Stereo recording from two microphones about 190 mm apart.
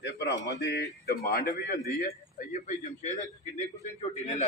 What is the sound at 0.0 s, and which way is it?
A man's voice, 65° left (ahead or behind).